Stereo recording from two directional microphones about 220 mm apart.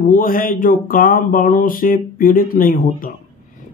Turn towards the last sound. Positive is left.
turn(degrees=40)  # may be behind; listen again after turning